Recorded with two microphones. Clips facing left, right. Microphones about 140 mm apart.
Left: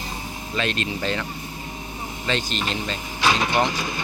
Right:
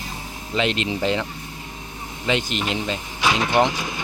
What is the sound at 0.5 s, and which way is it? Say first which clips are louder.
Speech: right 4 dB; 20° right (ahead or behind).